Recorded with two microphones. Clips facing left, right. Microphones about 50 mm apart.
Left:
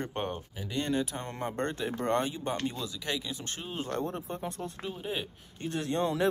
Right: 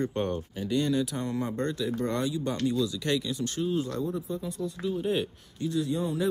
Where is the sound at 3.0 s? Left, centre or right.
Centre.